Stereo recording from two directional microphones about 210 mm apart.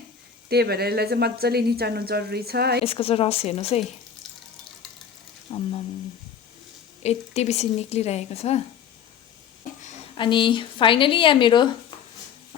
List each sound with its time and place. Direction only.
0.4 s a woman's voice: 50° right (ahead or behind)
2.8 s a woman's voice: 25° left (ahead or behind)
5.5 s a sound: 25° left (ahead or behind)
7.0 s speech: 30° left (ahead or behind)
10.2 s a woman's voice: 20° left (ahead or behind)